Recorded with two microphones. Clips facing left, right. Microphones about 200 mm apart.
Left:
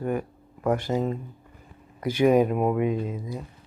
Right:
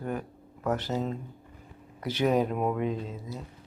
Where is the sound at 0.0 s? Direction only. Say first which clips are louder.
Left 6 dB; 10° left (ahead or behind).